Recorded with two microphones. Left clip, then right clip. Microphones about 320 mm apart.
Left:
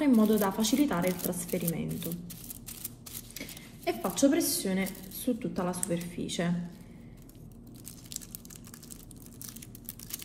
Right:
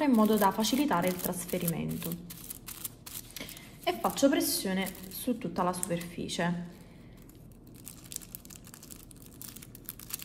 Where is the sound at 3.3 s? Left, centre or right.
Right.